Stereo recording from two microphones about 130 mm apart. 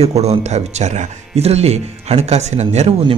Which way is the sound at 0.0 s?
55° right (ahead or behind).